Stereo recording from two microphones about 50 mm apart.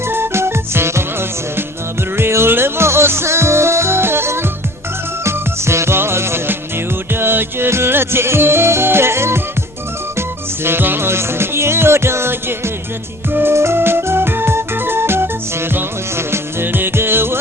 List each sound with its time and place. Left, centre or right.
0.1 s music: right